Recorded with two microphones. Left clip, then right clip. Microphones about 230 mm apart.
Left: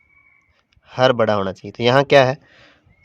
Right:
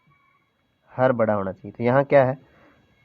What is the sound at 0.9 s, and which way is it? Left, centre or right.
Speech, left.